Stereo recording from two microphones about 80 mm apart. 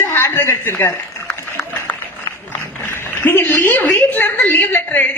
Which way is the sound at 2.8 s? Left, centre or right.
Left.